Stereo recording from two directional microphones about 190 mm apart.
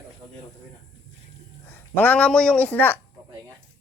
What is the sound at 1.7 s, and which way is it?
A man's voice, 10° left (ahead or behind).